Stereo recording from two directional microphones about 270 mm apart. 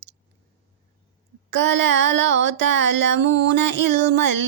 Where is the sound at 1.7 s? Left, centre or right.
Right.